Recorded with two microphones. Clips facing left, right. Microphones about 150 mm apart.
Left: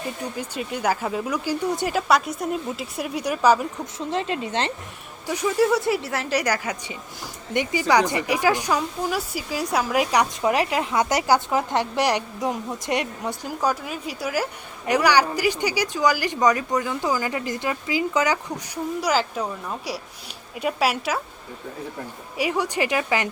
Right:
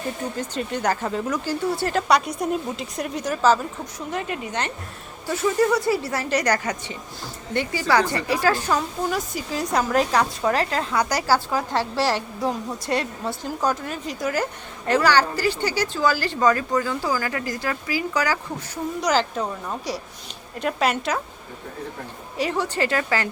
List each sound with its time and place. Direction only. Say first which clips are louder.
0.3 s a woman's voice: right 2 dB; 10° left (ahead or behind)
4.1 s speech: left 3 dB; 25° left (ahead or behind)
5.2 s a woman's voice: even; 15° left (ahead or behind)
19.0 s a woman's voice: right 2 dB; 5° left (ahead or behind)
22.4 s a woman's voice: even; 10° left (ahead or behind)